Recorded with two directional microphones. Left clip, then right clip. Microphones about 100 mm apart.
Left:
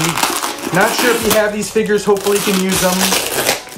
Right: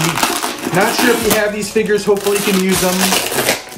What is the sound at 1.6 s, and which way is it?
Speech, 30° left (ahead or behind).